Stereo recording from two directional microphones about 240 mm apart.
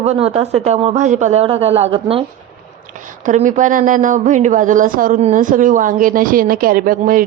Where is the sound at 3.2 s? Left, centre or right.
Right.